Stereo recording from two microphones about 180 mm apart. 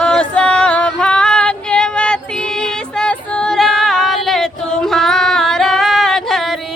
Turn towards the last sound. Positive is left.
turn(degrees=0)  # may be behind; listen again after turning